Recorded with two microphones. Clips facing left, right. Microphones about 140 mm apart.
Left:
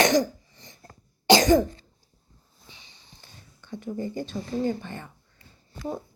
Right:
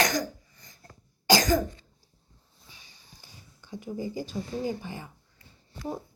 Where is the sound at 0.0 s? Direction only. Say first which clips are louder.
Left 6 dB; 25° left (ahead or behind).